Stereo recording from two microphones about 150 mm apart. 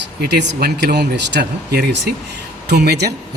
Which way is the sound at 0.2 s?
90° right.